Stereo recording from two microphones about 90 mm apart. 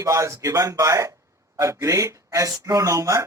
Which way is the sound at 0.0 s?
35° right (ahead or behind).